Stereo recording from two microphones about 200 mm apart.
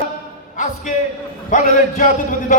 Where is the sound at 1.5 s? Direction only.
40° left (ahead or behind).